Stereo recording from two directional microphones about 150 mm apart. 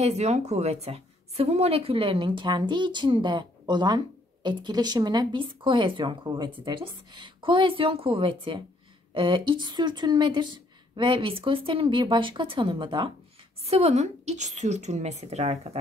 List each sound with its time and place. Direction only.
0.0 s a woman's voice: 45° right (ahead or behind); by 13.1 s 30° right (ahead or behind)
13.7 s a woman's voice: 45° right (ahead or behind)